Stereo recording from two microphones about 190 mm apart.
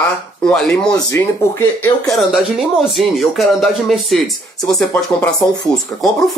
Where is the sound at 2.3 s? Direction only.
Centre (ahead or behind).